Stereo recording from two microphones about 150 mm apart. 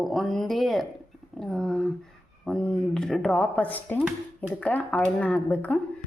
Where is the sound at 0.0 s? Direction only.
Centre (ahead or behind).